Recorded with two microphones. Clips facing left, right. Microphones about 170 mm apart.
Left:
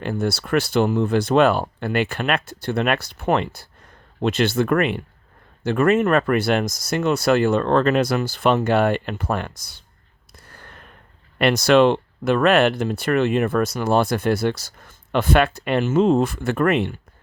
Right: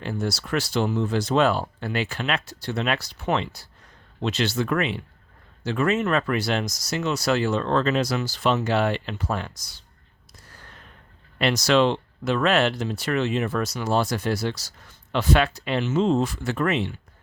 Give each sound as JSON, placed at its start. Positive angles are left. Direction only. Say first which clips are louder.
{"t": 0.0, "sound": "speech", "louder": "left 5 dB", "side_deg": 55}
{"t": 10.3, "sound": "a sound", "louder": "left 4 dB", "side_deg": 55}
{"t": 11.3, "sound": "speech", "louder": "left 5 dB", "side_deg": 55}